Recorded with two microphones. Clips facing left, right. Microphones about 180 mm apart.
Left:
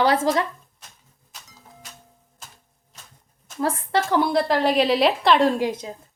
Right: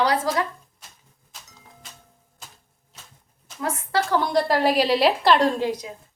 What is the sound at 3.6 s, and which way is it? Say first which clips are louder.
Speech: left 2 dB; 35° left (ahead or behind).